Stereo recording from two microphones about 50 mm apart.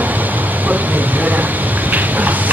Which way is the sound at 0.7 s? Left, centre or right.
Right.